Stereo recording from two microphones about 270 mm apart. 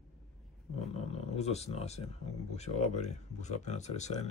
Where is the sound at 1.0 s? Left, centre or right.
Left.